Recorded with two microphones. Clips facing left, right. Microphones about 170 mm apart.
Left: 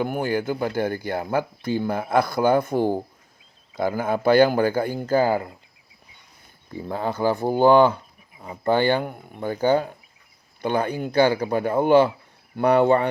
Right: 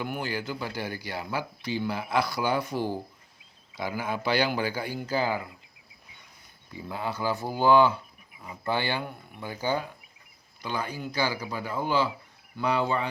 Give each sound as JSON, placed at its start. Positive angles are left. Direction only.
{"t": 0.0, "sound": "speech", "side_deg": 50}
{"t": 6.9, "sound": "speech", "side_deg": 50}